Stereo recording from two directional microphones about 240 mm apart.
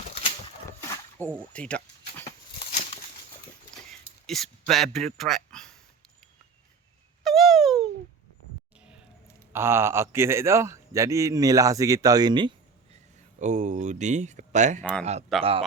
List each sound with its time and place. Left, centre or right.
1.2 s a man's voice: centre
1.5 s a sound: centre
4.3 s speech: centre
7.3 s a sound: centre
9.5 s a man's voice: centre
13.4 s speech: right
14.8 s speech: centre